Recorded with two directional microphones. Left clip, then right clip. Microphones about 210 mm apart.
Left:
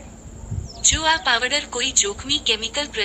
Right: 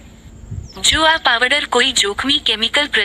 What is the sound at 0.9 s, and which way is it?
Speech, 40° right (ahead or behind).